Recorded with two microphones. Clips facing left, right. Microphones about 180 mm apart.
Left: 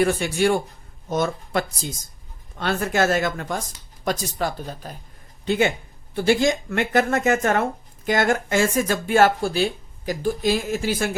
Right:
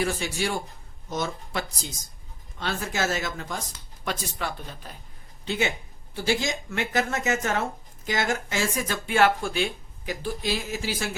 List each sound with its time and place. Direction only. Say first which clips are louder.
0.0 s speech: left 8 dB; 55° left (ahead or behind)
4.0 s speech: left 6 dB; 40° left (ahead or behind)
5.5 s speech: left 7 dB; 50° left (ahead or behind)